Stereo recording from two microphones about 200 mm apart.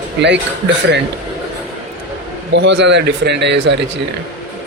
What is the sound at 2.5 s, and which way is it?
Speech, 60° right (ahead or behind).